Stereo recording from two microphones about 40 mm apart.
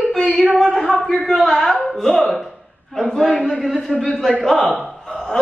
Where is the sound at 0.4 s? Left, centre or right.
Centre.